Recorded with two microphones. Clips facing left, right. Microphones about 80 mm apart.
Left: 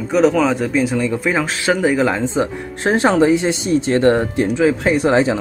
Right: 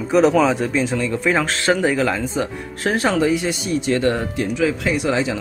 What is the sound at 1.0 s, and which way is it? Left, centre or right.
Speech, centre.